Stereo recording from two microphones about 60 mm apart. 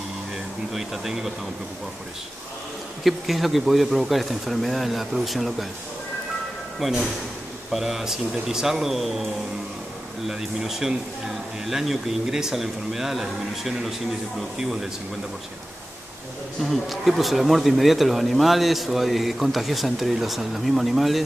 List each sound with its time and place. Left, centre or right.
0.7 s speech: centre
3.0 s speech: centre
6.8 s speech: centre
16.6 s speech: centre